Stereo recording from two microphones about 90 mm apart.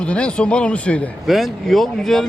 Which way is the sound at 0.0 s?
10° left (ahead or behind).